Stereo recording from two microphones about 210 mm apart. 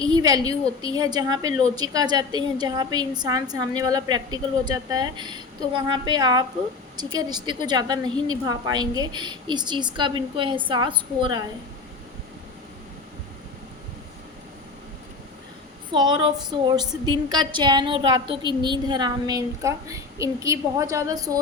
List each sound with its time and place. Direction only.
0.0 s a woman's voice: 20° right (ahead or behind)
15.9 s a woman's voice: 20° right (ahead or behind)